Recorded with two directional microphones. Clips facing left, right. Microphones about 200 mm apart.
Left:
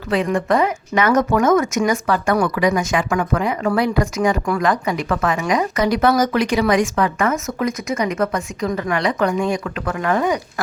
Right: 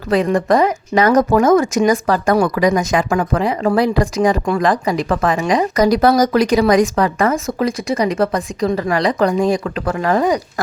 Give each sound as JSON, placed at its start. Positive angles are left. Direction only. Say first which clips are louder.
{"t": 0.1, "sound": "speech", "louder": "right 4 dB", "side_deg": -40}